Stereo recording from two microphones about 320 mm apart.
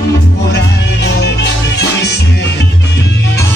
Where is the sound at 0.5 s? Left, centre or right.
Left.